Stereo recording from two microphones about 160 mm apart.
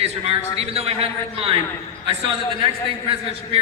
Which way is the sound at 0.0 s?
40° right (ahead or behind).